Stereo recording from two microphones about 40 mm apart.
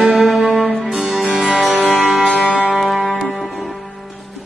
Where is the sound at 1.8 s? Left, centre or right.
Right.